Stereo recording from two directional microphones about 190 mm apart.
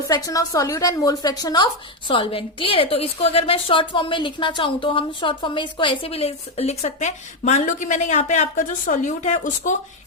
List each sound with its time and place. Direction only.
0.1 s a woman's voice: 20° left (ahead or behind); by 9.7 s 40° left (ahead or behind)